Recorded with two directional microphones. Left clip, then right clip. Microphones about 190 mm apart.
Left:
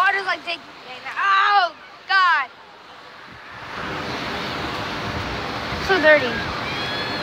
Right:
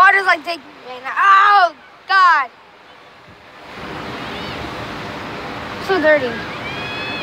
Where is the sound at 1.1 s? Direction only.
45° right (ahead or behind).